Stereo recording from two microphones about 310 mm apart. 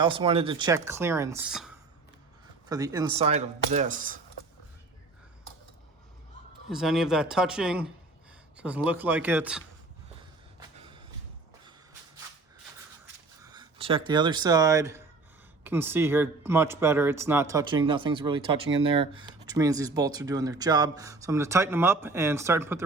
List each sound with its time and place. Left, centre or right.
0.0 s speech: centre
6.7 s speech: centre
10.8 s a sound: centre
13.4 s speech: centre